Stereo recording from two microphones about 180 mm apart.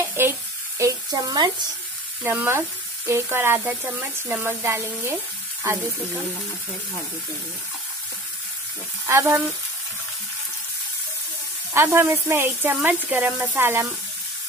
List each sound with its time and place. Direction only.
0.0 s sizzle: 10° right (ahead or behind)
0.7 s speech: 20° right (ahead or behind)
9.0 s frying: 15° right (ahead or behind)
11.7 s speech: 15° right (ahead or behind)